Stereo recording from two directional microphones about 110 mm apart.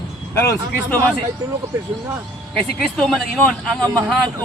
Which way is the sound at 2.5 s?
5° left (ahead or behind).